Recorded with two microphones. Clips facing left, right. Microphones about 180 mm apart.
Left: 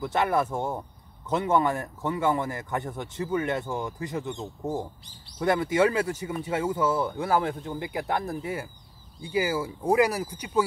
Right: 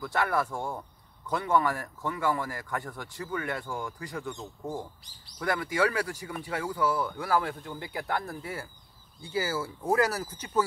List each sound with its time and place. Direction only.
0.0 s speech: 20° left (ahead or behind)